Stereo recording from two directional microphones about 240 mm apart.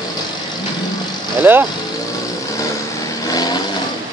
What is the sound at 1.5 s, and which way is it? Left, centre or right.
Speech, centre.